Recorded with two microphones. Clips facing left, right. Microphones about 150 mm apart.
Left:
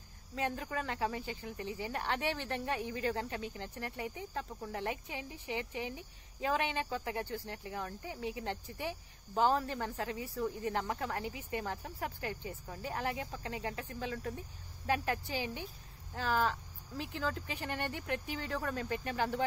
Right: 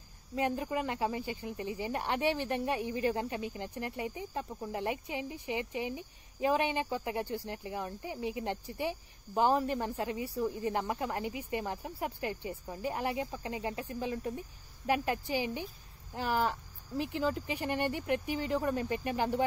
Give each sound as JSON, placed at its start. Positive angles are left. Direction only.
{"t": 0.4, "sound": "speech", "side_deg": -15}